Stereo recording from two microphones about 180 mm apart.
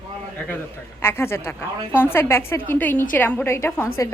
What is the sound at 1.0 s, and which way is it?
A woman's voice, 15° left (ahead or behind).